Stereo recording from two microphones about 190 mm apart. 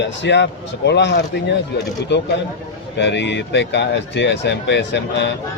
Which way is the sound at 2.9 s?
65° left (ahead or behind).